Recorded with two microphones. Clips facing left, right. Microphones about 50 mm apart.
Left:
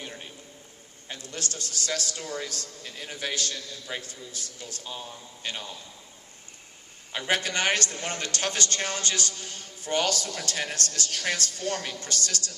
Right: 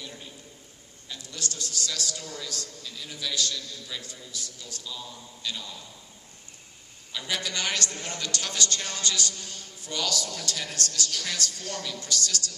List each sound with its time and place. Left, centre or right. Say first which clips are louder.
0.0 s a sound: left 2 dB; left
1.0 s a man's voice: left 1 dB; left
7.1 s a man's voice: left 5 dB; left